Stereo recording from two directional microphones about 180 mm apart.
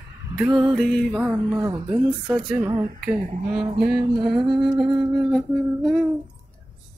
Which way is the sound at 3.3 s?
35° right (ahead or behind).